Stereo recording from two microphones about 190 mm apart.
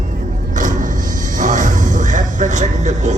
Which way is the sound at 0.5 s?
45° right (ahead or behind).